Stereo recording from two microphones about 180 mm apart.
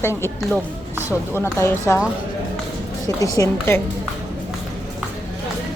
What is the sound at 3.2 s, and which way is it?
Speech, 20° left (ahead or behind).